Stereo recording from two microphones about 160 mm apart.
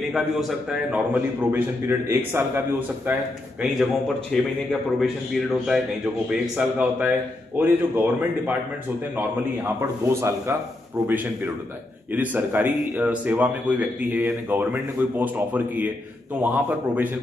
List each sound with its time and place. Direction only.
0.1 s a man's voice: centre (ahead or behind)
3.6 s a man's voice: centre (ahead or behind)
9.8 s a man's voice: 20° right (ahead or behind)